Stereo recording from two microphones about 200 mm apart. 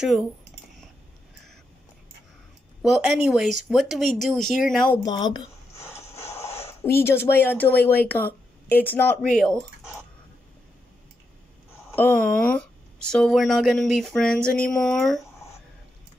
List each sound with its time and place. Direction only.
2.8 s speech: centre (ahead or behind)
5.0 s speech: 20° left (ahead or behind)
5.8 s a sound: 15° left (ahead or behind)
8.6 s speech: 10° left (ahead or behind)
11.9 s speech: 5° left (ahead or behind)